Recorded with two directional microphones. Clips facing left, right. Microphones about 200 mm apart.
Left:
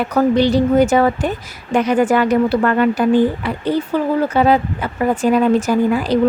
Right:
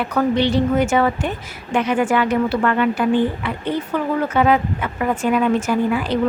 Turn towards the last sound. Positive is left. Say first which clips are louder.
# left 3 dB
turn(degrees=40)  # may be behind; listen again after turning